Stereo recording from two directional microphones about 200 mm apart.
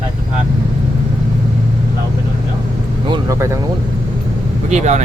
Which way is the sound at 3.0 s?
20° right (ahead or behind).